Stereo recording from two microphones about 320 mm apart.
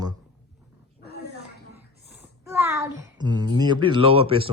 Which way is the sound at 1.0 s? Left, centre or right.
Left.